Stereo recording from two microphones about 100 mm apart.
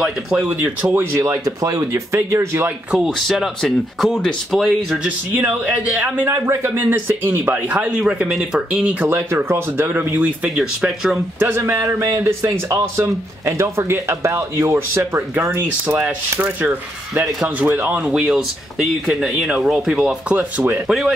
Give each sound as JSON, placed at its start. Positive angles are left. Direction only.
{"t": 0.4, "sound": "a man's voice", "side_deg": -20}
{"t": 1.2, "sound": "speech", "side_deg": -35}
{"t": 3.2, "sound": "speech", "side_deg": 0}
{"t": 5.3, "sound": "speech", "side_deg": -20}
{"t": 6.2, "sound": "a man's voice", "side_deg": -30}
{"t": 8.0, "sound": "speech", "side_deg": -10}
{"t": 9.0, "sound": "speech", "side_deg": -25}
{"t": 11.4, "sound": "a man's voice", "side_deg": -20}
{"t": 16.0, "sound": "speech", "side_deg": -15}
{"t": 18.1, "sound": "speech", "side_deg": -10}